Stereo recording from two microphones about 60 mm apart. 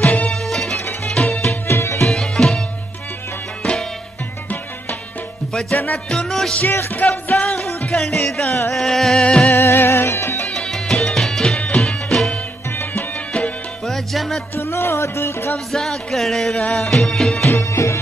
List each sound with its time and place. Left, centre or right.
0.3 s music: centre
1.2 s music: left
1.5 s music: left
2.0 s tabla: centre
5.5 s music: centre
6.6 s music: left
7.0 s music: left
7.3 s music: centre
9.6 s music: left
10.4 s music: centre
13.8 s music: centre
14.6 s music: left
15.7 s music: centre
17.5 s music: left